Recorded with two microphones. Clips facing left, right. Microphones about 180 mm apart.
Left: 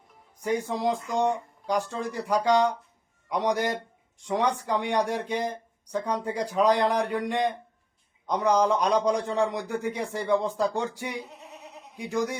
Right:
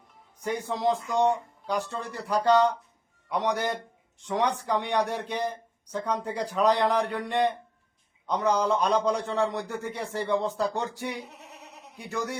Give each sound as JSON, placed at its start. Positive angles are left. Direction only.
{"t": 0.4, "sound": "speech", "side_deg": 10}
{"t": 11.3, "sound": "goat", "side_deg": -70}
{"t": 11.9, "sound": "speech", "side_deg": 15}